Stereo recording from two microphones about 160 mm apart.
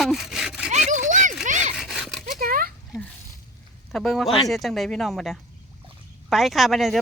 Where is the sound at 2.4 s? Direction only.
65° right (ahead or behind).